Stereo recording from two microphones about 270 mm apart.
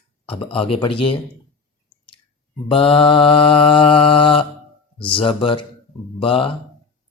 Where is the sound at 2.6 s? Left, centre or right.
Centre.